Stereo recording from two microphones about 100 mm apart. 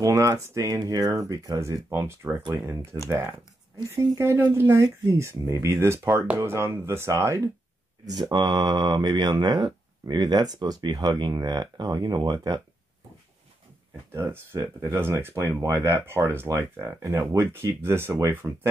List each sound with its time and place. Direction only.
0.0 s speech: 35° right (ahead or behind)
4.5 s speech: 25° right (ahead or behind)
8.0 s speech: 40° right (ahead or behind)
14.1 s speech: 25° right (ahead or behind)